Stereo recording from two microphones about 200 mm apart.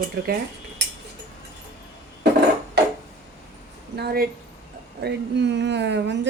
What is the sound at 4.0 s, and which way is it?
A woman's voice, 50° right (ahead or behind).